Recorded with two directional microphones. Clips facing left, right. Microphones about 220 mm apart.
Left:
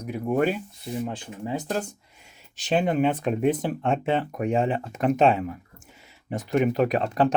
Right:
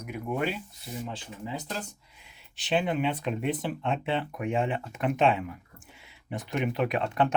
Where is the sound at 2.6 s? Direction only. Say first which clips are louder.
Left 5 dB; 45° left (ahead or behind).